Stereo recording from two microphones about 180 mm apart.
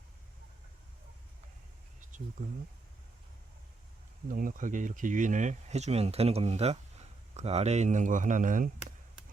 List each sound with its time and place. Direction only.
4.3 s speech: 50° right (ahead or behind)